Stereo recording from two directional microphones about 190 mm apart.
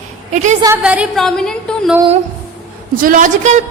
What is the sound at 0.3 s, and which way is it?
Speech, 35° right (ahead or behind).